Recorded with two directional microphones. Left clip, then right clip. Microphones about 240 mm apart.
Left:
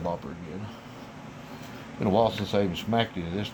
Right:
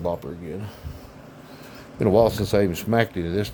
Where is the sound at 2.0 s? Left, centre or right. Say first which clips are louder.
Right 6 dB; right.